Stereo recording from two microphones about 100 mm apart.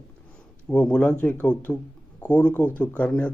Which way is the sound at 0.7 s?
10° left (ahead or behind).